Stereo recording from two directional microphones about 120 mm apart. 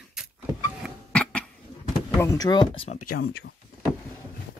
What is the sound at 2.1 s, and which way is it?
Speech, 25° left (ahead or behind).